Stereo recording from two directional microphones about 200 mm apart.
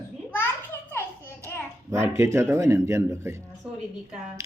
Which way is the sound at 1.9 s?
15° right (ahead or behind).